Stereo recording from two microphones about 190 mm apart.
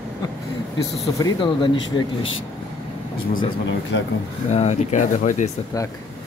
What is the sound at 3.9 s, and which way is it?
Speech, 70° left (ahead or behind).